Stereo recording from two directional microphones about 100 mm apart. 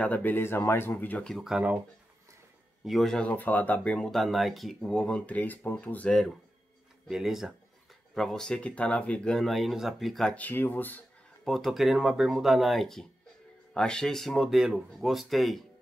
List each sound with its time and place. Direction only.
0.0 s speech: 15° left (ahead or behind)
1.3 s speech: 5° right (ahead or behind)
2.8 s speech: centre (ahead or behind)
3.2 s speech: 15° left (ahead or behind)
7.1 s speech: 5° right (ahead or behind)
10.3 s speech: 20° left (ahead or behind)
11.4 s speech: centre (ahead or behind)